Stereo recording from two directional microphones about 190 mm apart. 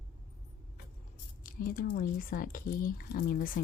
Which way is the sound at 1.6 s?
50° left (ahead or behind).